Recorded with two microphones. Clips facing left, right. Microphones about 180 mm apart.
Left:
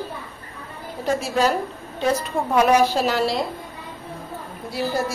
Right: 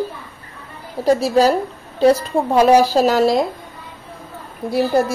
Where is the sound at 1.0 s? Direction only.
35° right (ahead or behind).